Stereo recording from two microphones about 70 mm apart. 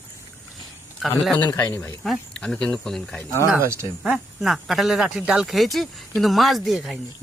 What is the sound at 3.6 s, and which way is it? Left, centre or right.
Speech, right.